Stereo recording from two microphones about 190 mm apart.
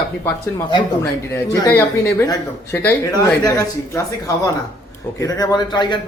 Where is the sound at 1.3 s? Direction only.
15° left (ahead or behind).